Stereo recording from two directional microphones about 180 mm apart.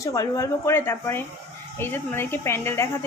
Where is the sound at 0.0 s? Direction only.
20° left (ahead or behind).